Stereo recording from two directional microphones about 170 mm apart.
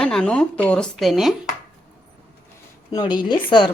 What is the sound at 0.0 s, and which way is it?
Speech, 5° left (ahead or behind).